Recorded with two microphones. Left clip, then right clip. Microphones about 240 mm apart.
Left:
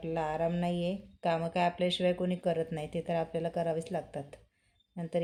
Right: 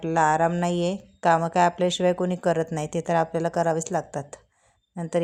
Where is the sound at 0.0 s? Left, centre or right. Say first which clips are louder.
Right 12 dB; right.